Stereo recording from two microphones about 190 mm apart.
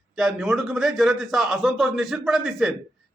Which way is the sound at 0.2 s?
Centre (ahead or behind).